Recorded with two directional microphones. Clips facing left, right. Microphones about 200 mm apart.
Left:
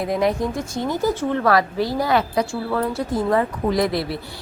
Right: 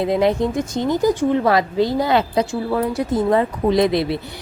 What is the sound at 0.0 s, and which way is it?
Speech, 25° right (ahead or behind).